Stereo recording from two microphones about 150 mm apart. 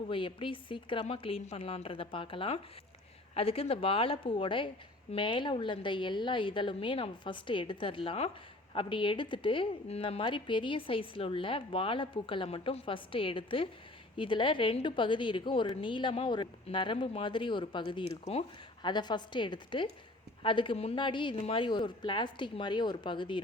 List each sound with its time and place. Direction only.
0.1 s a woman's voice: 35° left (ahead or behind)